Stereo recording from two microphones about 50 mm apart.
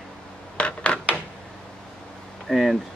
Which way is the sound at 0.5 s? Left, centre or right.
Left.